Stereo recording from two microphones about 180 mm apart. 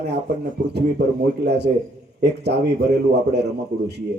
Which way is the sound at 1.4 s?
70° right (ahead or behind).